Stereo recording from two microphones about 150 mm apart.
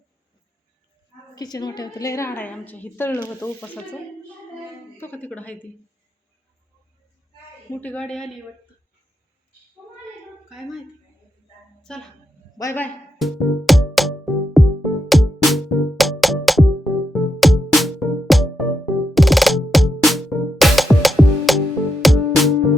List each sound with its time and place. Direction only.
1.4 s a woman's voice: 25° left (ahead or behind)
4.9 s a woman's voice: 15° left (ahead or behind)
7.7 s a woman's voice: 10° left (ahead or behind)
11.8 s a woman's voice: 5° left (ahead or behind)
12.5 s a woman's voice: 15° left (ahead or behind)
13.1 s music: centre (ahead or behind)